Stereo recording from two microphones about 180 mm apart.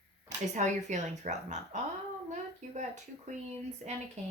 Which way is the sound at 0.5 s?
40° right (ahead or behind).